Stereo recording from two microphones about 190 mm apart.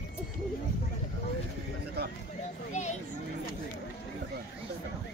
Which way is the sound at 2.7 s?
40° left (ahead or behind).